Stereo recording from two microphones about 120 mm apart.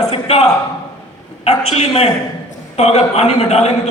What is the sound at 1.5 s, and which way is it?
A man's voice, 60° left (ahead or behind).